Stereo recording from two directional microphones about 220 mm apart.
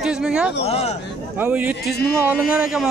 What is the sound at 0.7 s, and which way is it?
Speech, 30° left (ahead or behind).